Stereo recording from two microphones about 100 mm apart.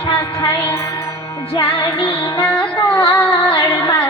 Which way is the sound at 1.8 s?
60° left (ahead or behind).